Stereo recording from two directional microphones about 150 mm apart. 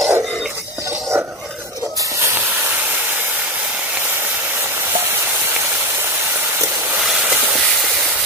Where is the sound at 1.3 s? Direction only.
Centre (ahead or behind).